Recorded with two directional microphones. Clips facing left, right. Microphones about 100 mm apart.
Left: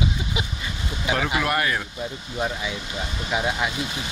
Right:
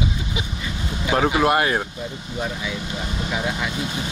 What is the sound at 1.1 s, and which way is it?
Speech, 40° right (ahead or behind).